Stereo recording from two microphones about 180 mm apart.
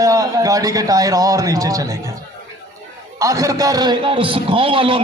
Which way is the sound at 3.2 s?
20° right (ahead or behind).